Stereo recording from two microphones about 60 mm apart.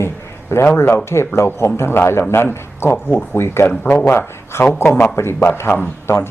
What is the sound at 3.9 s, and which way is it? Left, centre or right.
A man's voice, left.